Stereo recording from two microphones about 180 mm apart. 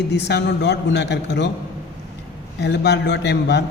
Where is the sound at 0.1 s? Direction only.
70° left (ahead or behind).